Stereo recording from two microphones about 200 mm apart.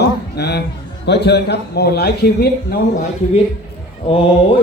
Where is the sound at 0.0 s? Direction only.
55° left (ahead or behind).